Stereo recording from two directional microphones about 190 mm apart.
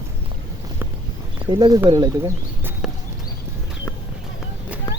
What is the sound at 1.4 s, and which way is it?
Speech, 25° right (ahead or behind).